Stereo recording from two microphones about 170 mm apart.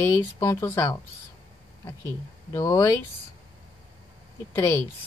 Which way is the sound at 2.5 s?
20° left (ahead or behind).